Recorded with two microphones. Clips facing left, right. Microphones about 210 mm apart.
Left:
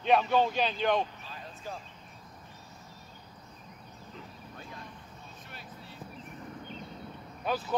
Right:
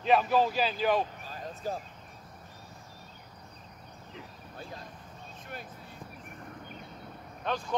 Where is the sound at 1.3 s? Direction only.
40° right (ahead or behind).